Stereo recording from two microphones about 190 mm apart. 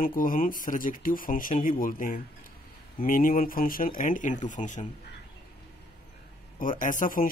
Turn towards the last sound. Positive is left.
turn(degrees=45)  # may be behind; listen again after turning